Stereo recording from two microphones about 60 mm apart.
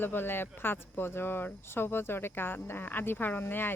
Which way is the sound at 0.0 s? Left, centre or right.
Left.